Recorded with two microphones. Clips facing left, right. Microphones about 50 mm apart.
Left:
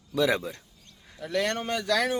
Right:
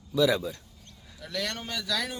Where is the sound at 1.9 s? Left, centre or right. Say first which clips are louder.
Left 7 dB; left.